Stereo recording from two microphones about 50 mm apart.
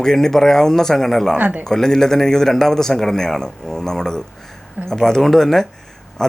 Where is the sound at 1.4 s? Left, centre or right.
Right.